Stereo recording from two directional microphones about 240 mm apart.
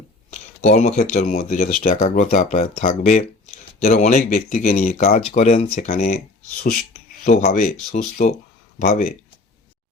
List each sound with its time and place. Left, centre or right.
0.3 s speech: left
7.3 s speech: left